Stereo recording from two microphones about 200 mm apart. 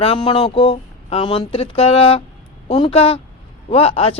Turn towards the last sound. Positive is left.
turn(degrees=30)  # may be behind; listen again after turning